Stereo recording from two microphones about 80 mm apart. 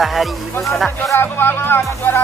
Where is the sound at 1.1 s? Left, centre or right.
Left.